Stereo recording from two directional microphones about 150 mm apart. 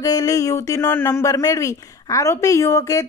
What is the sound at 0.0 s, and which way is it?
Speech, 25° left (ahead or behind).